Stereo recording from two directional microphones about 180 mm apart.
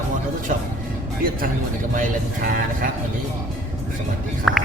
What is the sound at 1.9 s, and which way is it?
Speech, 50° right (ahead or behind).